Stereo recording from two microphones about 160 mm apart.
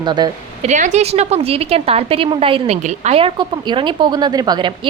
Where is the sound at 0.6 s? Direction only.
50° right (ahead or behind).